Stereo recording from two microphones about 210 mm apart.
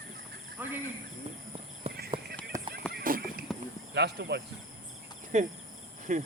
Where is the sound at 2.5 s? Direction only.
15° right (ahead or behind).